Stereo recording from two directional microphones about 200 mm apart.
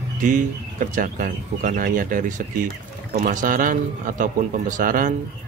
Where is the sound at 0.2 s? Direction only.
40° right (ahead or behind).